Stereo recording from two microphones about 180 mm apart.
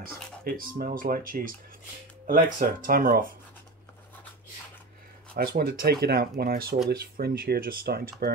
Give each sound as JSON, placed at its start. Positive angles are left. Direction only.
{"t": 0.0, "sound": "speech", "side_deg": -55}
{"t": 5.3, "sound": "speech", "side_deg": -55}